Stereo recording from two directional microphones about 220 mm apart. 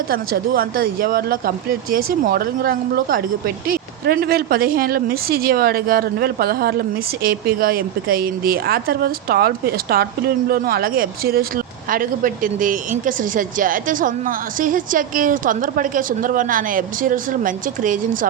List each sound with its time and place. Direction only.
0.1 s speech: 40° right (ahead or behind)